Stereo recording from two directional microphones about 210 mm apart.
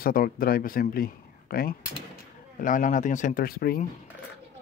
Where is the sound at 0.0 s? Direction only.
45° left (ahead or behind).